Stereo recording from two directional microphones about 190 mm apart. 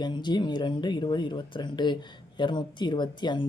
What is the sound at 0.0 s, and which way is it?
Speech, 25° left (ahead or behind).